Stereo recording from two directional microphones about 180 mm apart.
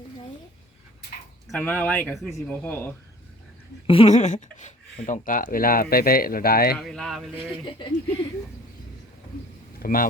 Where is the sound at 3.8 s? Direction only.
30° left (ahead or behind); by 6.7 s 55° left (ahead or behind).